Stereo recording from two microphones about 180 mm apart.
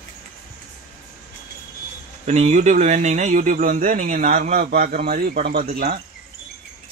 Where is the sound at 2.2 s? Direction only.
40° right (ahead or behind); by 5.8 s 60° right (ahead or behind).